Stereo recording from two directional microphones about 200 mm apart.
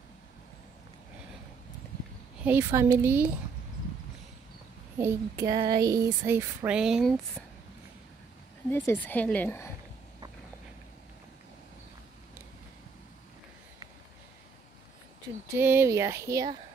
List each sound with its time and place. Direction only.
2.4 s speech: 10° right (ahead or behind)
4.9 s speech: 15° right (ahead or behind)
8.6 s a woman's voice: 10° left (ahead or behind)
15.5 s speech: 10° right (ahead or behind)